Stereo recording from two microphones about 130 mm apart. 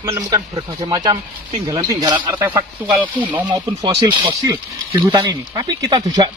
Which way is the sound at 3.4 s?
30° right (ahead or behind).